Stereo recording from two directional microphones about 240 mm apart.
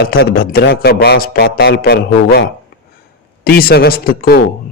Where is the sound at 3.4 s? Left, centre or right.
Left.